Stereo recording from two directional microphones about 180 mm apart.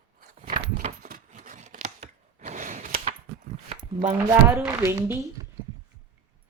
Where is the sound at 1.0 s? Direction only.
45° right (ahead or behind).